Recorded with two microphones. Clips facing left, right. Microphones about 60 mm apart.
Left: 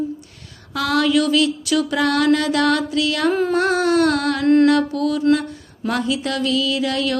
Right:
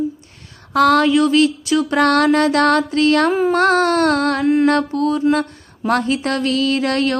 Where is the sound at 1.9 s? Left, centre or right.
Right.